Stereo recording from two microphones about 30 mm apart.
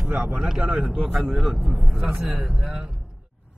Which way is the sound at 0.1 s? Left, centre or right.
Right.